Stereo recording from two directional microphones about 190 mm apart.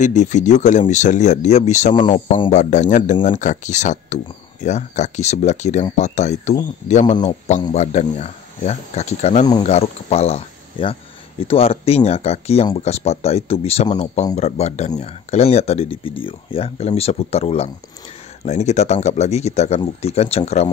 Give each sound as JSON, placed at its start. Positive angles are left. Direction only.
{"t": 0.0, "sound": "speech", "side_deg": 40}